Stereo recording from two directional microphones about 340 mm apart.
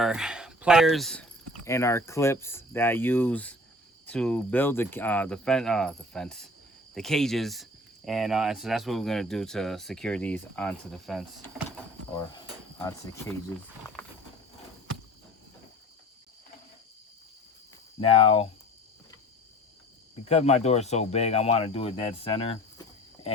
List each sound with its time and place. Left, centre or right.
0.0 s speech: centre
12.4 s cricket: centre
18.0 s speech: centre
20.2 s speech: centre